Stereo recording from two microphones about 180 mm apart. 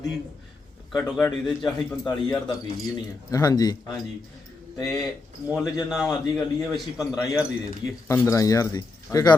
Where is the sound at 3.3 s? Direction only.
20° left (ahead or behind).